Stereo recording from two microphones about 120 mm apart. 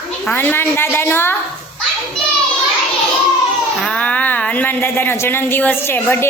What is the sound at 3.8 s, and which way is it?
A woman's voice, 10° left (ahead or behind).